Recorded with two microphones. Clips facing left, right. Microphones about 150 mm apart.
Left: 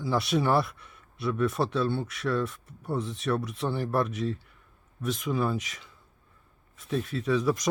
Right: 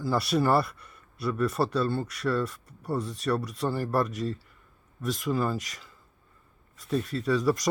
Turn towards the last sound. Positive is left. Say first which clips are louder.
# right 1 dB
turn(degrees=0)  # may be behind; listen again after turning